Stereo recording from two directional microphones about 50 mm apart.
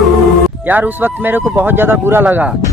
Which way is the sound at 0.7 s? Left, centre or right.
Right.